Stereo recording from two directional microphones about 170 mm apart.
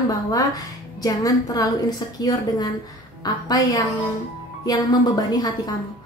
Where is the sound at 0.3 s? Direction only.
20° left (ahead or behind).